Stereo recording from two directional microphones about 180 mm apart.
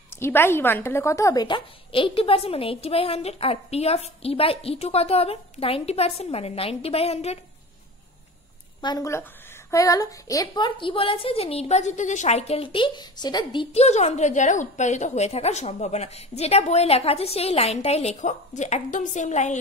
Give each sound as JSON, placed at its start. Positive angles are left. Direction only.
{"t": 0.1, "sound": "a woman's voice", "side_deg": 15}
{"t": 8.8, "sound": "a woman's voice", "side_deg": 20}